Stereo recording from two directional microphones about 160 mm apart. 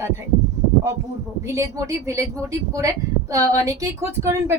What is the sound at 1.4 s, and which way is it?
A woman's voice, 20° right (ahead or behind).